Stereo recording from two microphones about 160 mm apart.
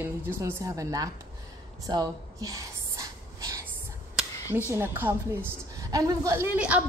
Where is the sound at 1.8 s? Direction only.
20° right (ahead or behind).